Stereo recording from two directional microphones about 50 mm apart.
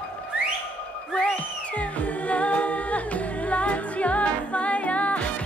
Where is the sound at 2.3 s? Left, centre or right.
Left.